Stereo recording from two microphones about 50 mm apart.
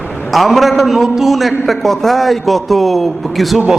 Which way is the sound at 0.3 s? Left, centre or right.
Centre.